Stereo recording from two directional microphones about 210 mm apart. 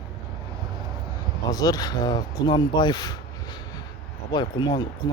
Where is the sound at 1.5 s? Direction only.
15° left (ahead or behind).